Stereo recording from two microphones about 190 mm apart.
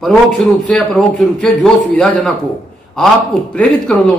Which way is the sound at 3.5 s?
5° left (ahead or behind).